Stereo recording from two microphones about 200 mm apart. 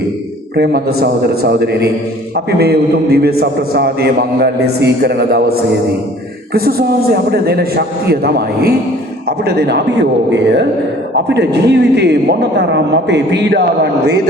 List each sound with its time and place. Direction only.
0.5 s a man's voice: 50° right (ahead or behind)